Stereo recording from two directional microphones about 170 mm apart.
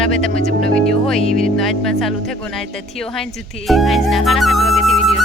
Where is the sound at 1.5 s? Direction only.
Centre (ahead or behind).